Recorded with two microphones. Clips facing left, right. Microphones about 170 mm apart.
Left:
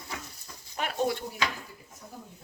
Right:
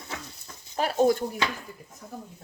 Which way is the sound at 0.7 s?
40° right (ahead or behind).